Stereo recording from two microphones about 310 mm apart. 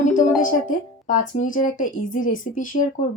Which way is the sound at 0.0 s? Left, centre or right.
Left.